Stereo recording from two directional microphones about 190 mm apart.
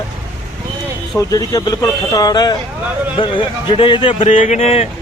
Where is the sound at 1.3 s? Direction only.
20° left (ahead or behind).